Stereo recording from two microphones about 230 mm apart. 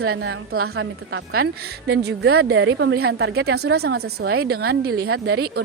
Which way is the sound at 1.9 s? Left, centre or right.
Right.